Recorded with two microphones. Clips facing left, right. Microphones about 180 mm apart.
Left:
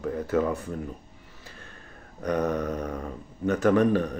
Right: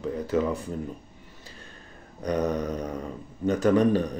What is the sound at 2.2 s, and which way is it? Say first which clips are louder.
Speech: even; 15° right (ahead or behind).